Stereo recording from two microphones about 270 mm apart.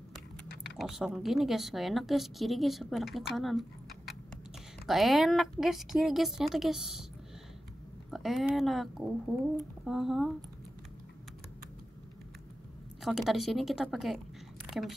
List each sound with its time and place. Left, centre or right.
0.7 s speech: centre
4.8 s speech: centre
8.1 s speech: centre
13.0 s speech: centre